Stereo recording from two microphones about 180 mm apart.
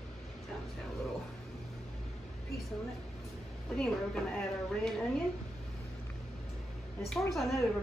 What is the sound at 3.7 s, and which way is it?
Speech, centre (ahead or behind).